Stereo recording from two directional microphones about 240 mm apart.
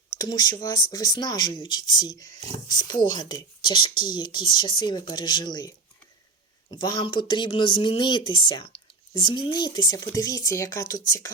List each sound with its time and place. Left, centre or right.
0.1 s speech: centre